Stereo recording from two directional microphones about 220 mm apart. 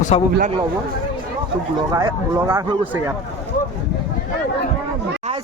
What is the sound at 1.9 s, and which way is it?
Speech, 15° right (ahead or behind).